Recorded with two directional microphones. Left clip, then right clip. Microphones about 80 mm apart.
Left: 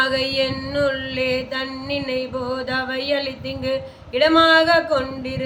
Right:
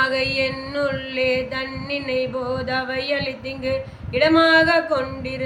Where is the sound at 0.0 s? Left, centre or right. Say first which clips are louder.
Even; left.